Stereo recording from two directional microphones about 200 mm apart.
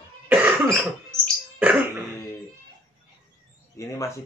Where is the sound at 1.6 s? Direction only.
10° right (ahead or behind).